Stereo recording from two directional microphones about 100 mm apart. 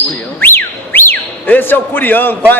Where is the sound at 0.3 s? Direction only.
20° left (ahead or behind).